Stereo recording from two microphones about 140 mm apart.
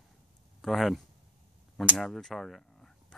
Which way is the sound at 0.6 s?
Centre (ahead or behind).